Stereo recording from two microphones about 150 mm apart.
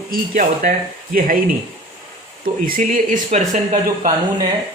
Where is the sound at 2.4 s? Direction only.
70° right (ahead or behind); by 3.8 s 50° right (ahead or behind).